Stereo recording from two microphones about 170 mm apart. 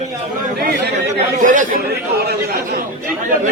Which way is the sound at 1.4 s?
50° right (ahead or behind).